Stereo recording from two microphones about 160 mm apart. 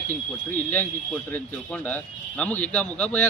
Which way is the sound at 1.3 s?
10° left (ahead or behind).